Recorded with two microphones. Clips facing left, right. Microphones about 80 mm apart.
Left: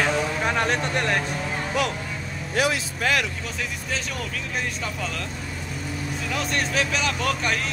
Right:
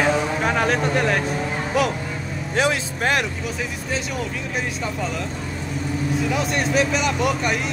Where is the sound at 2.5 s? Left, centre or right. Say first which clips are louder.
Right 3 dB; right.